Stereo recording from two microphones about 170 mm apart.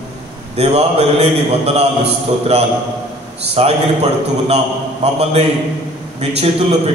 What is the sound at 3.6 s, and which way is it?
Speech, 35° right (ahead or behind).